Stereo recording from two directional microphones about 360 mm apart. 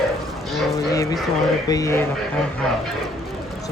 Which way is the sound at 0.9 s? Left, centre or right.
Centre.